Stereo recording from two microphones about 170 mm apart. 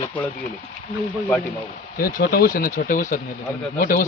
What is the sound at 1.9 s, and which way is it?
A man's voice, 55° left (ahead or behind).